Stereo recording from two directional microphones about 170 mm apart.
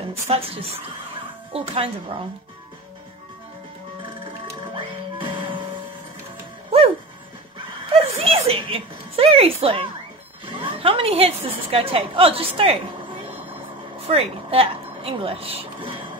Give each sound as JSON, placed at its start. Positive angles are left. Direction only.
{"t": 0.3, "sound": "speech", "side_deg": -35}
{"t": 4.7, "sound": "music", "side_deg": -30}
{"t": 7.9, "sound": "music", "side_deg": -35}
{"t": 10.4, "sound": "a sound", "side_deg": -30}
{"t": 11.4, "sound": "speech", "side_deg": -35}
{"t": 14.0, "sound": "speech", "side_deg": -35}